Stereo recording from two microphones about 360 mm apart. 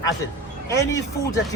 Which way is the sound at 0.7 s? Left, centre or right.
Centre.